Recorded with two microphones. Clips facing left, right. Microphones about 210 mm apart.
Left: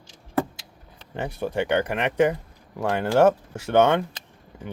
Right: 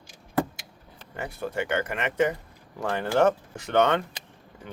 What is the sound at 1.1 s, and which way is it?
Speech, 25° left (ahead or behind).